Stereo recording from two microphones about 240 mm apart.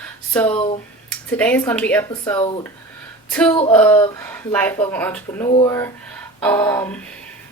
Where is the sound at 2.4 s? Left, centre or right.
Left.